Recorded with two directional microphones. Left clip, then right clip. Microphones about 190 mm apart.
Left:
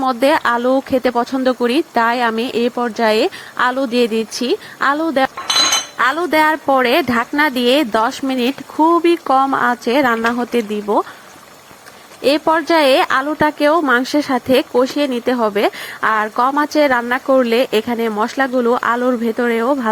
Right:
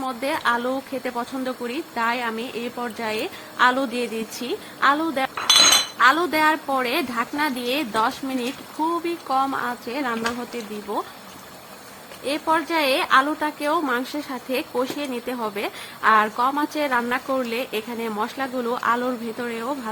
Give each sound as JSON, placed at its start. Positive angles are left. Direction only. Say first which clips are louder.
{"t": 0.0, "sound": "speech", "louder": "left 10 dB", "side_deg": 35}
{"t": 12.2, "sound": "speech", "louder": "left 8 dB", "side_deg": 40}